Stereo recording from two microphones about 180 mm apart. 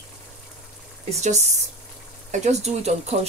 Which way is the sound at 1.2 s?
40° right (ahead or behind).